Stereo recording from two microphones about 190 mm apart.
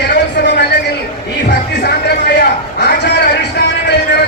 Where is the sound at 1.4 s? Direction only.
65° left (ahead or behind).